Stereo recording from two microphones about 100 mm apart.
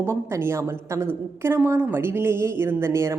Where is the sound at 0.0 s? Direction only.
25° right (ahead or behind).